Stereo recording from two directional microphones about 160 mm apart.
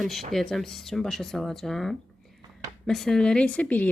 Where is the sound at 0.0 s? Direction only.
Centre (ahead or behind).